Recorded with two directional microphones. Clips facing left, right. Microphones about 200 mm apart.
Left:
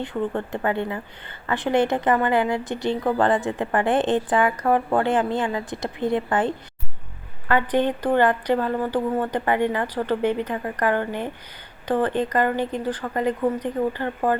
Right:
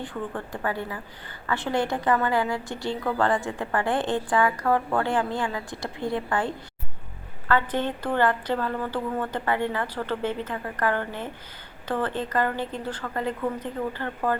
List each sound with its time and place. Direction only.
0.0 s a woman's voice: 25° left (ahead or behind)